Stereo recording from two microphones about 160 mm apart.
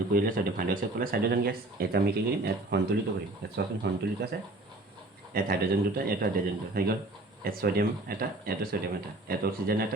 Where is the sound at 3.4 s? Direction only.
90° right.